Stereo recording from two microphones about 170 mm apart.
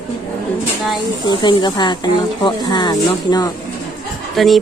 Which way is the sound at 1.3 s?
25° left (ahead or behind).